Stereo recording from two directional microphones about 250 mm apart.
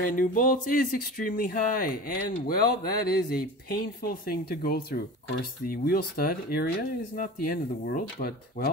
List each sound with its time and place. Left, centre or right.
0.0 s speech: left